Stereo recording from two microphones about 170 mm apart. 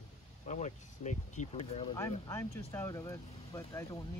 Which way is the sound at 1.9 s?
15° left (ahead or behind).